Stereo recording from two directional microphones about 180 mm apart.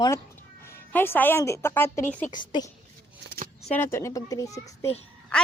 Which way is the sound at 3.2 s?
55° right (ahead or behind).